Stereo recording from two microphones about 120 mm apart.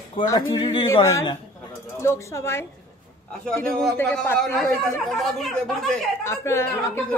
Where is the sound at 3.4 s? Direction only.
10° left (ahead or behind).